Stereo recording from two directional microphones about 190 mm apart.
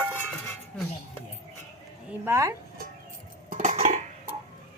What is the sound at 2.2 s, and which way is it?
Speech, 15° right (ahead or behind).